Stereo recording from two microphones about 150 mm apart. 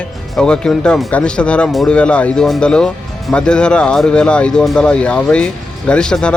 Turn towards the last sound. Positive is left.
turn(degrees=5)  # may be behind; listen again after turning